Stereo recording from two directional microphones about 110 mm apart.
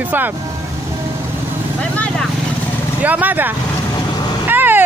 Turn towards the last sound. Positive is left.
turn(degrees=-15)  # may be behind; listen again after turning